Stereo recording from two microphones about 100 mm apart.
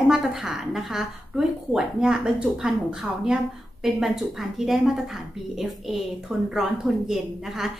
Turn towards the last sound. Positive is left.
turn(degrees=-5)  # may be behind; listen again after turning